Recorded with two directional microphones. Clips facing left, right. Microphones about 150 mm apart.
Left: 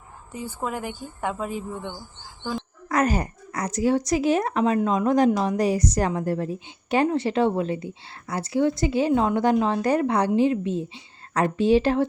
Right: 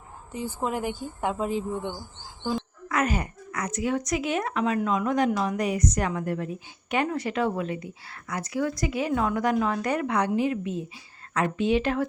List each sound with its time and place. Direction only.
0.6 s a woman's voice: 20° right (ahead or behind)
2.9 s speech: 40° left (ahead or behind)